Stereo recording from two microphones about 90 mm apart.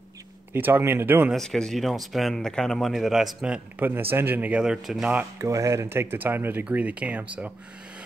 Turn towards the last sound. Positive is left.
turn(degrees=-10)  # may be behind; listen again after turning